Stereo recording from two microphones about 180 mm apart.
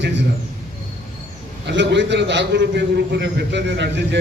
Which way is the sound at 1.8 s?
80° right.